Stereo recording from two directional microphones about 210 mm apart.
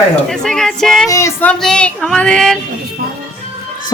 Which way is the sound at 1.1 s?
15° left (ahead or behind).